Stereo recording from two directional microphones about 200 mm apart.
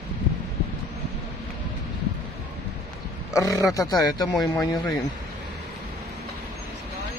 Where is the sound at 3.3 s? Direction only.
15° left (ahead or behind).